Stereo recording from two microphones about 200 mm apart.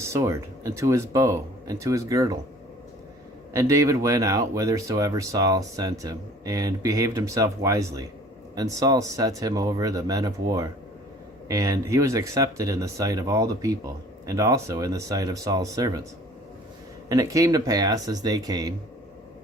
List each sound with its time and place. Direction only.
0.0 s speech: 15° right (ahead or behind)
3.5 s speech: 15° right (ahead or behind)
17.1 s speech: 15° right (ahead or behind)